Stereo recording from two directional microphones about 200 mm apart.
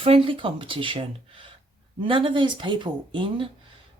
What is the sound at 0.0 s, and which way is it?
Speech, 25° right (ahead or behind).